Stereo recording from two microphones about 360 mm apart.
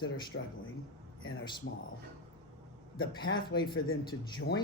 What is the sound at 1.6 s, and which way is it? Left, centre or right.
Speech, left.